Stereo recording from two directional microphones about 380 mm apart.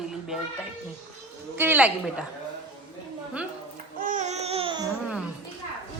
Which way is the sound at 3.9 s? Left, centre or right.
Centre.